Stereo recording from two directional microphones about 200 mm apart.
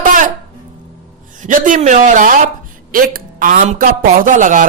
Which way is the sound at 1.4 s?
40° right (ahead or behind).